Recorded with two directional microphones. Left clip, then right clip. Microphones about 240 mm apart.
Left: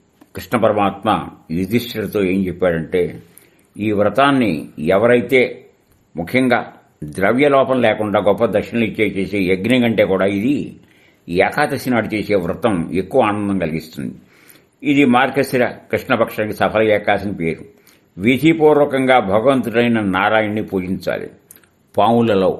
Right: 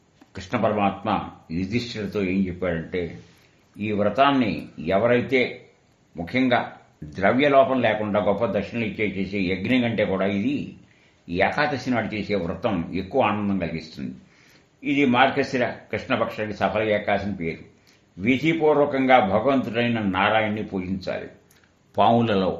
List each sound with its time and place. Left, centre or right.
0.3 s speech: left
21.9 s speech: left